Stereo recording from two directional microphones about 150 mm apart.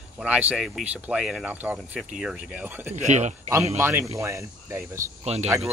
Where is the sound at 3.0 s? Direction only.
50° right (ahead or behind).